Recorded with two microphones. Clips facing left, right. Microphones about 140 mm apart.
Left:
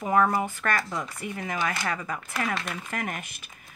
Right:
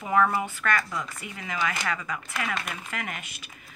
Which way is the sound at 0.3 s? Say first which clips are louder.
Left 1 dB; 45° left (ahead or behind).